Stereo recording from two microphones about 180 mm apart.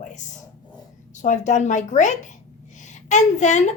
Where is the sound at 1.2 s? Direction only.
40° left (ahead or behind).